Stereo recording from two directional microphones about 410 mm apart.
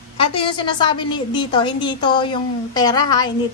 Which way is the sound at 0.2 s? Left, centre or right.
Centre.